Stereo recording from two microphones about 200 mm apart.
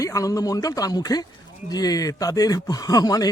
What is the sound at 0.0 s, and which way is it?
A man's voice, 15° left (ahead or behind).